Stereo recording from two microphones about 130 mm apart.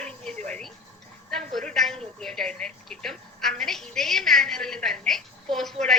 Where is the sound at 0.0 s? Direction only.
5° left (ahead or behind).